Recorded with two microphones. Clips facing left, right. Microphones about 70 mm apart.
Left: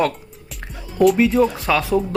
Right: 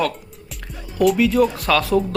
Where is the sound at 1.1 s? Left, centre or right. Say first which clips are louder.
Left 1 dB; left.